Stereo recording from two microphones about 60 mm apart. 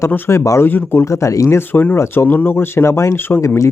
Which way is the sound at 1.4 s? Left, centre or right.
Left.